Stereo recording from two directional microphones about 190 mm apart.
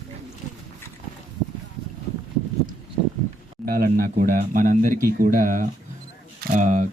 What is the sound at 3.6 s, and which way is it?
Speech, 50° right (ahead or behind).